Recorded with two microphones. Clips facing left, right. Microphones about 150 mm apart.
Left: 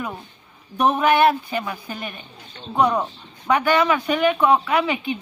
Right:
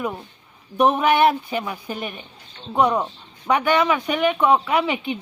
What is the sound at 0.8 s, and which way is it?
Speech, 15° right (ahead or behind).